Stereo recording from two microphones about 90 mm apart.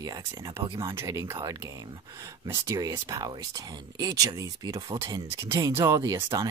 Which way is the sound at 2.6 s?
35° right (ahead or behind).